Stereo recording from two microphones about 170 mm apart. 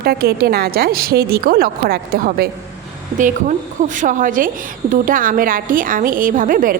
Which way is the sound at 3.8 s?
50° right (ahead or behind).